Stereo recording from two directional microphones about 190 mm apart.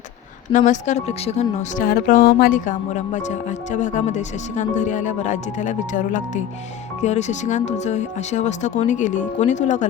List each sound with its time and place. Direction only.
0.5 s speech: 40° left (ahead or behind)
1.8 s speech: 50° left (ahead or behind)